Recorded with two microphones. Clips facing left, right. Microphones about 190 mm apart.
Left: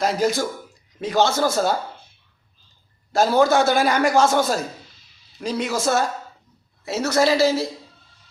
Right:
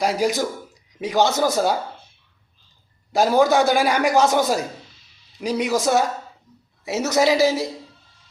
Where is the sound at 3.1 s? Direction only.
15° right (ahead or behind).